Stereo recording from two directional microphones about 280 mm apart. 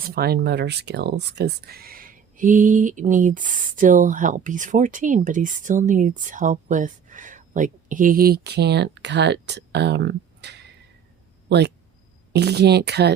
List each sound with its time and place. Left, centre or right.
0.1 s speech: right